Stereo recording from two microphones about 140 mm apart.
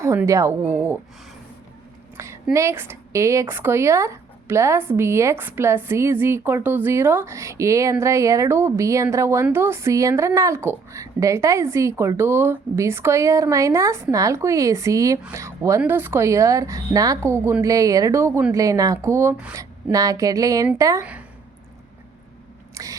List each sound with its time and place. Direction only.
0.0 s a woman's voice: 20° right (ahead or behind)
2.1 s speech: 20° right (ahead or behind)
19.5 s speech: 25° right (ahead or behind)
21.0 s a woman's voice: 10° right (ahead or behind)
22.7 s biting: 25° right (ahead or behind)